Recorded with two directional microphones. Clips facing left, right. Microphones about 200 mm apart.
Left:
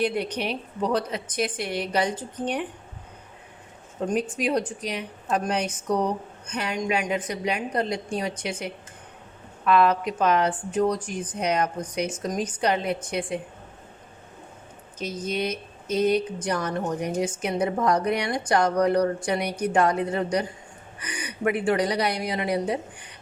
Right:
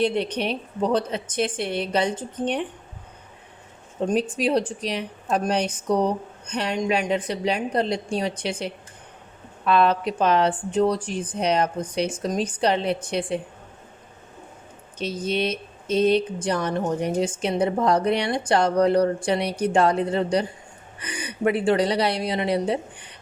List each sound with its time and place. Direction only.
0.0 s speech: 25° right (ahead or behind)
4.1 s a woman's voice: 30° right (ahead or behind)
14.9 s speech: 30° right (ahead or behind)